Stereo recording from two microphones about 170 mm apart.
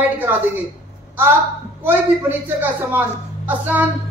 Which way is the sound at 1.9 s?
10° right (ahead or behind).